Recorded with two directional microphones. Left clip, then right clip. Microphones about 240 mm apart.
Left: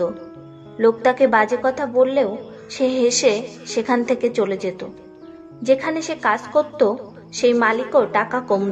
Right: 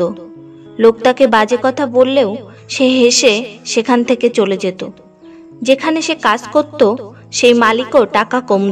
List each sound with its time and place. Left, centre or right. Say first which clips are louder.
0.7 s a woman's voice: right 6 dB; right